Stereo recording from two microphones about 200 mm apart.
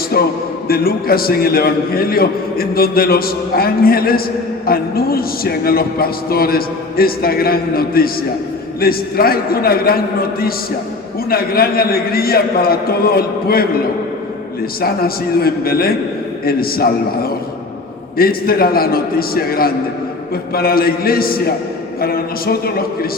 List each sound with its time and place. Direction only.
0.1 s a man's voice: 50° left (ahead or behind)
14.8 s a man's voice: 50° left (ahead or behind)